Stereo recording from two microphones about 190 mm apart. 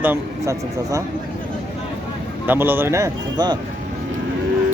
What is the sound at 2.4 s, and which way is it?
Speech, 10° right (ahead or behind).